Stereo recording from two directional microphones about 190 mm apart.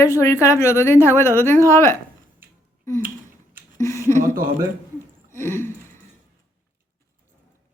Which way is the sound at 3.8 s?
15° left (ahead or behind).